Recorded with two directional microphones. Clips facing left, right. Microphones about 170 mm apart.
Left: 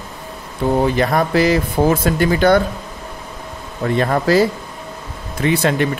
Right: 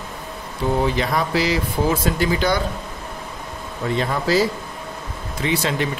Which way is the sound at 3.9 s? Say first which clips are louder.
Left 5 dB; 55° left (ahead or behind).